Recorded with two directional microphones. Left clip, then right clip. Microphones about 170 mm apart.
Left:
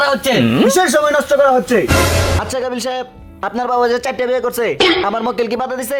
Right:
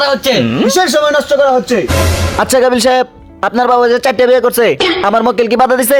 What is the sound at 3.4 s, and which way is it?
Speech, 25° right (ahead or behind).